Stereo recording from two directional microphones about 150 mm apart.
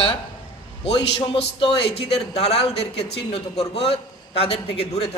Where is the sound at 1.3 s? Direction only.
40° left (ahead or behind).